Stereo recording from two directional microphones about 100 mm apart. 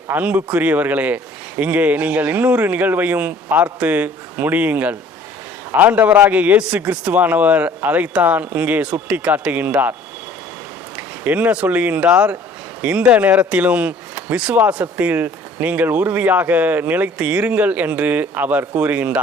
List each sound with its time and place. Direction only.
0.1 s speech: 15° right (ahead or behind)
10.9 s speech: 15° right (ahead or behind)